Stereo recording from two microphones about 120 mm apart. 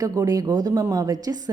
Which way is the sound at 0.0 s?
30° right (ahead or behind).